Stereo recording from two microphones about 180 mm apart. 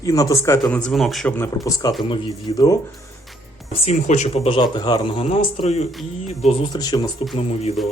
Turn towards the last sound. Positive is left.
turn(degrees=35)  # may be behind; listen again after turning